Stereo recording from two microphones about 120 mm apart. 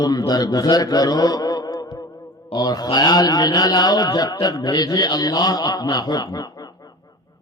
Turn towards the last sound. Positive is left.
turn(degrees=35)  # may be behind; listen again after turning